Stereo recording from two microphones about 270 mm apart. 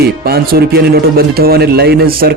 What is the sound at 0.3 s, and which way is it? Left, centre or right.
Speech, right.